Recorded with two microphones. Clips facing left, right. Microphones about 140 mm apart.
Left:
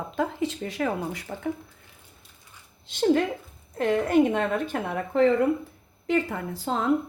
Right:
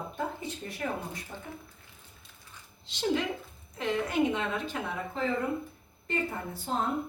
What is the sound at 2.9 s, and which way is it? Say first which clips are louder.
A woman's voice: left 7 dB; 50° left (ahead or behind).